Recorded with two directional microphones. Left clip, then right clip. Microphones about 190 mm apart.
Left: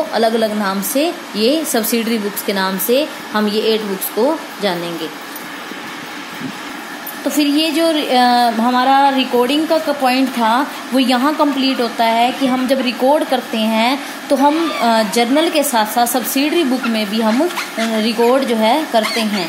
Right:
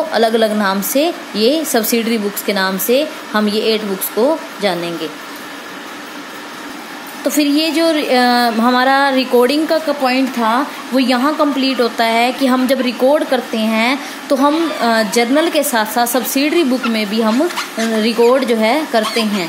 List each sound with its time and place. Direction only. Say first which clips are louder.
0.1 s a woman's voice: right 3 dB; 20° right (ahead or behind)
7.2 s a woman's voice: right 1 dB; 20° right (ahead or behind)
8.7 s a sound: left 2 dB; 30° right (ahead or behind)
9.7 s a woman's voice: even; 10° right (ahead or behind)